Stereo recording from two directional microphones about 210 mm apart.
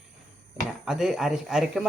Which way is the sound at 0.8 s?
Centre (ahead or behind).